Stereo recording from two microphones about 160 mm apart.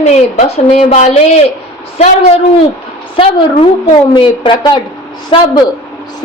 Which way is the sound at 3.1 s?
35° left (ahead or behind).